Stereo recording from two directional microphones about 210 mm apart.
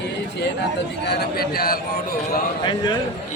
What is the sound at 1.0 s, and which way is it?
Speech, 50° left (ahead or behind).